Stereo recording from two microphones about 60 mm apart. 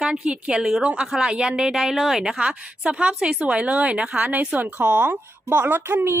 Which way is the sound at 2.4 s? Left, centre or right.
Centre.